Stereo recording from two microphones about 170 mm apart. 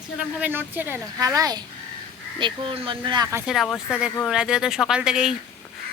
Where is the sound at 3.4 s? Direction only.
Centre (ahead or behind).